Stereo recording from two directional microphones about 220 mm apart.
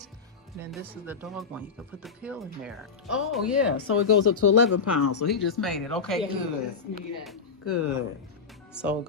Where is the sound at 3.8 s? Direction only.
70° left (ahead or behind).